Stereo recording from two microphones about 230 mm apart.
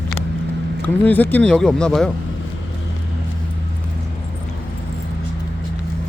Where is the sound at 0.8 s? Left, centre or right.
Centre.